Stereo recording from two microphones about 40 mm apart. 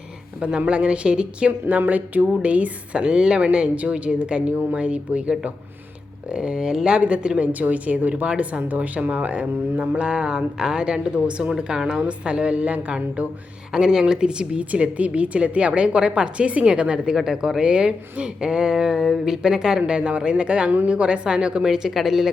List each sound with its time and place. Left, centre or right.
0.3 s a woman's voice: right
1.9 s speech: right
2.4 s a woman's voice: right
7.0 s a woman's voice: right
8.1 s a woman's voice: right
8.4 s a woman's voice: right
13.7 s a woman's voice: centre
14.6 s a woman's voice: right
20.7 s a woman's voice: right
21.6 s a woman's voice: centre